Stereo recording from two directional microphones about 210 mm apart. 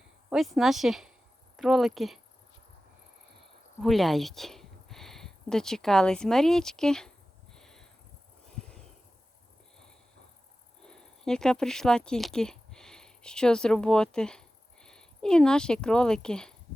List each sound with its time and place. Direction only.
0.3 s speech: centre (ahead or behind)
3.8 s speech: centre (ahead or behind)
7.5 s a sound: 5° left (ahead or behind)
10.8 s speech: 5° left (ahead or behind)